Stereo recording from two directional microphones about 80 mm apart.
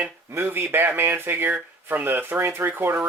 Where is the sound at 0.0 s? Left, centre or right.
Right.